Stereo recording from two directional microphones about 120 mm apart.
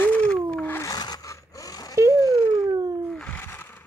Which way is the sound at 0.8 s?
35° left (ahead or behind).